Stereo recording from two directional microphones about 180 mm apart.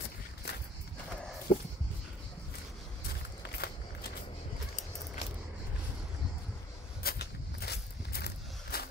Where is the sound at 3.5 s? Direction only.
60° left (ahead or behind).